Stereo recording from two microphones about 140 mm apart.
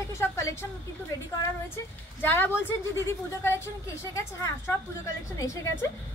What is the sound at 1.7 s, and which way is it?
A woman's voice, 15° left (ahead or behind).